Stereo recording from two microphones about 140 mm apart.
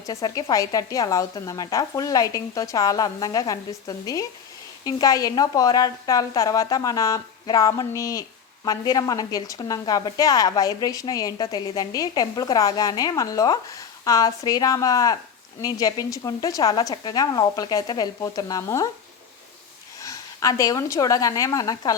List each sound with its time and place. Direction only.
0.0 s a woman's voice: 25° left (ahead or behind)
20.0 s a woman's voice: 25° left (ahead or behind)